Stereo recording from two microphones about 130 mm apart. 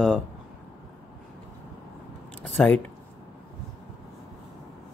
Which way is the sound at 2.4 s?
10° left (ahead or behind).